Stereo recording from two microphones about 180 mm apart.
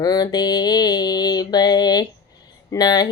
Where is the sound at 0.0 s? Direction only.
20° left (ahead or behind).